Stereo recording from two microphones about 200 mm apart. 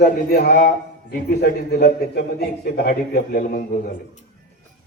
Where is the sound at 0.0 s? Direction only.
45° left (ahead or behind).